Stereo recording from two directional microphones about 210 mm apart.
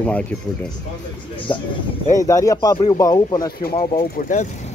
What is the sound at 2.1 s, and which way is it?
Speech, 15° left (ahead or behind).